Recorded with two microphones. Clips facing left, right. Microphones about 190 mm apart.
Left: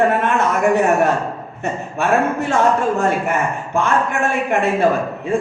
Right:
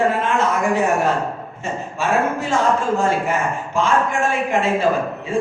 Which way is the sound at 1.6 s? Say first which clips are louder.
Left 3 dB; 65° left (ahead or behind).